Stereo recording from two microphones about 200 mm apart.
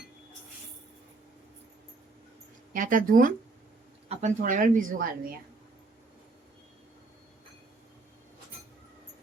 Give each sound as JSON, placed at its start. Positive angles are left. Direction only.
{"t": 2.7, "sound": "speech", "side_deg": -40}